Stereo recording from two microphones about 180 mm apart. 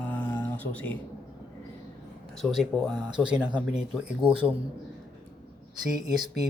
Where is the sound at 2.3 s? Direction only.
Centre (ahead or behind).